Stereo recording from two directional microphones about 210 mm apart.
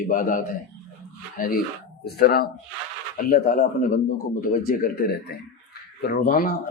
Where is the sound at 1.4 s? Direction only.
40° left (ahead or behind).